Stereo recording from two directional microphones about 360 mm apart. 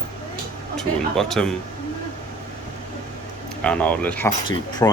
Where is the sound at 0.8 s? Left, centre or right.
Centre.